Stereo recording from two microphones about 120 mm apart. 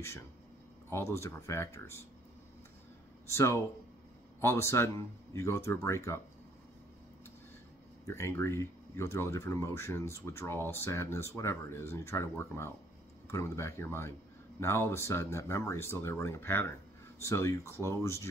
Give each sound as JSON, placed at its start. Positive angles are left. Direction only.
{"t": 0.8, "sound": "speech", "side_deg": 20}
{"t": 3.3, "sound": "speech", "side_deg": 25}
{"t": 8.1, "sound": "speech", "side_deg": 20}